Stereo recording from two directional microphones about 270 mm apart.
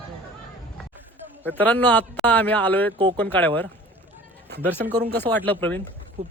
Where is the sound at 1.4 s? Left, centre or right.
Centre.